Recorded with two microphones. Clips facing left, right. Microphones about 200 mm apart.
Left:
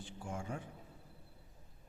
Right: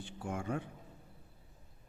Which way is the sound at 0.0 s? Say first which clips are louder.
Right 4 dB; 65° right (ahead or behind).